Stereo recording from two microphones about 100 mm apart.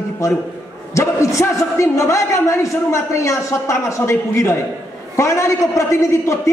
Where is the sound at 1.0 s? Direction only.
30° left (ahead or behind).